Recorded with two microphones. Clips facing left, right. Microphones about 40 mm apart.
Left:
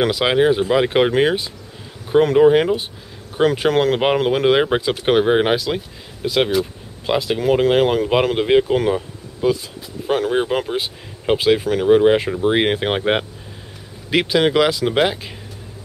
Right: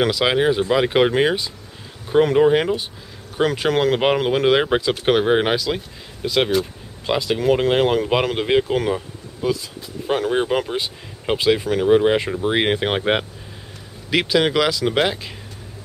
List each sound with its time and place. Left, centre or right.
0.1 s speech: centre
9.4 s speech: centre
10.0 s speech: centre